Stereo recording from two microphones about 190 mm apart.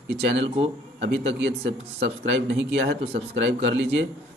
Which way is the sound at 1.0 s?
70° right (ahead or behind).